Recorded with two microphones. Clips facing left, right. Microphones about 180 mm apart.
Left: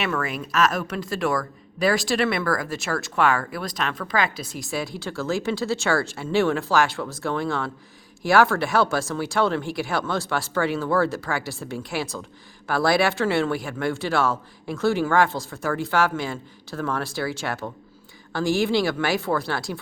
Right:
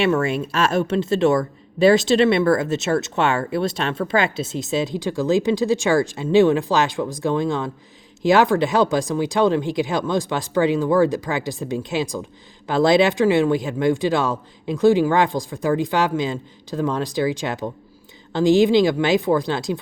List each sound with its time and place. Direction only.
0.0 s speech: 25° right (ahead or behind)